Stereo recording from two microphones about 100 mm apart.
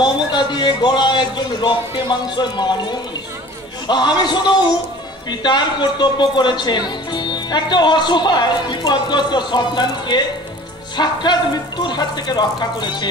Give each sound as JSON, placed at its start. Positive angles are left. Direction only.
{"t": 0.0, "sound": "speech", "side_deg": 50}